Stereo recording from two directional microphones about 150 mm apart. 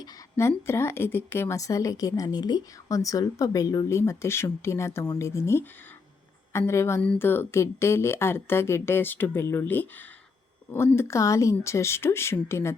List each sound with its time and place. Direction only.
0.0 s a woman's voice: 15° left (ahead or behind)